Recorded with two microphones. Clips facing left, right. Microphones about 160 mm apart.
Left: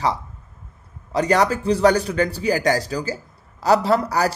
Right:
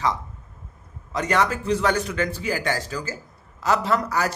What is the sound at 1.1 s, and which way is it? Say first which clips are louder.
A man's voice: left 4 dB; 35° left (ahead or behind).